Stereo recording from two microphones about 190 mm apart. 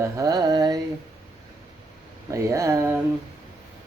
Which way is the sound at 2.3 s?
15° right (ahead or behind).